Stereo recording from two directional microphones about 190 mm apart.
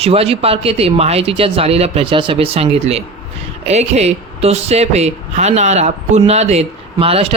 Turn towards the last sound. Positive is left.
turn(degrees=-30)  # may be behind; listen again after turning